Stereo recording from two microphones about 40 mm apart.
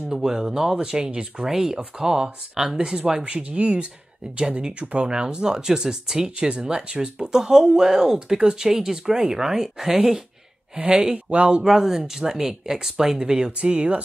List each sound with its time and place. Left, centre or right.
0.1 s speech: centre
10.8 s speech: right
11.6 s speech: centre
13.3 s speech: right